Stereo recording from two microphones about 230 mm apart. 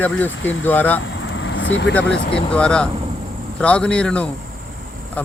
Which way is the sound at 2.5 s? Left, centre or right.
Centre.